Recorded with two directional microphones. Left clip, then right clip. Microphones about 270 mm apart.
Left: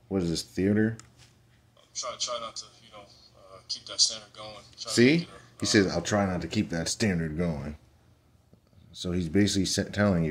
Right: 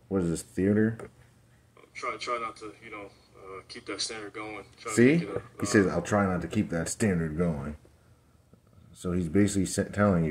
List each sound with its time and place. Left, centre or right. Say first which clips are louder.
0.1 s speech: even; centre
2.0 s speech: right 1 dB; centre
4.8 s speech: even; centre
9.0 s speech: even; centre